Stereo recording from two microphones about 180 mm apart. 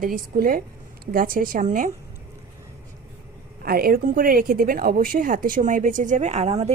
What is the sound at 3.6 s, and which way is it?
Speech, 55° right (ahead or behind).